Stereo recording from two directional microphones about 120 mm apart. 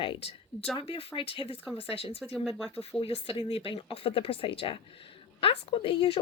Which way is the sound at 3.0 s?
45° left (ahead or behind).